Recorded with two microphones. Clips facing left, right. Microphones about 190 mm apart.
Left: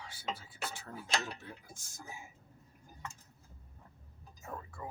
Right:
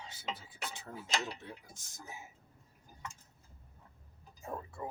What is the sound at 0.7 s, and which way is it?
Mechanisms, 20° right (ahead or behind).